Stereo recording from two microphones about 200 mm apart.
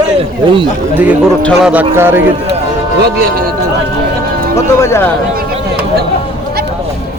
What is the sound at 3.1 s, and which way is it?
Speech, 50° right (ahead or behind).